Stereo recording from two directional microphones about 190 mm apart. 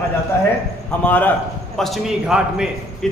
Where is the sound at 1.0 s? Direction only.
10° left (ahead or behind).